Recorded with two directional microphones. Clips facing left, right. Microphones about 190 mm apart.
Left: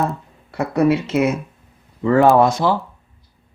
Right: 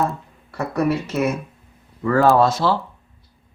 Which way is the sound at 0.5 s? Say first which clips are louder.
Left 4 dB; 20° left (ahead or behind).